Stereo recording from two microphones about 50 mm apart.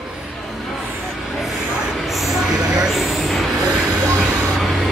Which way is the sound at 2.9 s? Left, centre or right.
Centre.